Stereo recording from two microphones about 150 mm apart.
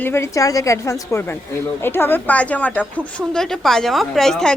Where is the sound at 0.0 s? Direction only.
15° left (ahead or behind).